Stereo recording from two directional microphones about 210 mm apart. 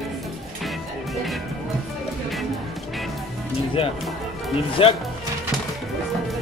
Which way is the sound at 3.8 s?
25° left (ahead or behind).